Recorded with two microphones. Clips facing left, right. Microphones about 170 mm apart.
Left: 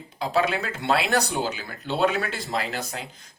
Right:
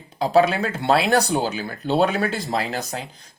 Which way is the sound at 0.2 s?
35° right (ahead or behind).